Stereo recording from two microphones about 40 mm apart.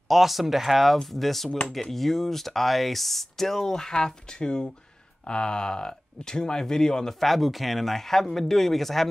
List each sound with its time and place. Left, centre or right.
0.1 s speech: centre
7.2 s speech: centre